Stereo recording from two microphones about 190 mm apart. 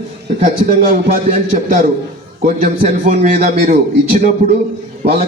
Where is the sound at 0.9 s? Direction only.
50° right (ahead or behind).